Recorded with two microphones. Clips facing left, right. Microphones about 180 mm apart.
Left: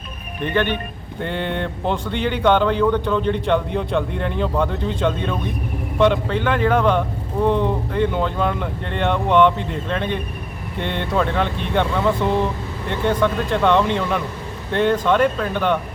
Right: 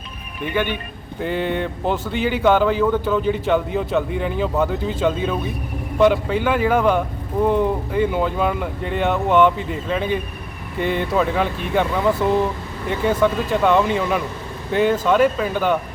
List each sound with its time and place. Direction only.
0.4 s speech: 10° right (ahead or behind)